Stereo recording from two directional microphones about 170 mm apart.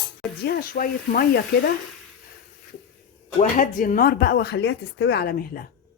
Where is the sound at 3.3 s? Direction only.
50° left (ahead or behind).